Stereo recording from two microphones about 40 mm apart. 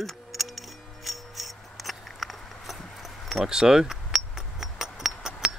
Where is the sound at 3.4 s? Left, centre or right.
Centre.